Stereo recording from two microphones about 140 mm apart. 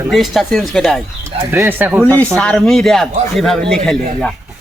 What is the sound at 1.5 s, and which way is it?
Speech, 15° right (ahead or behind).